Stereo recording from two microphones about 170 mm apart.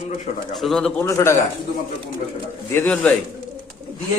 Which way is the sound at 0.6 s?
Centre (ahead or behind).